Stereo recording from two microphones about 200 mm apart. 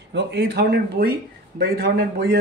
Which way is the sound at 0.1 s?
60° right (ahead or behind).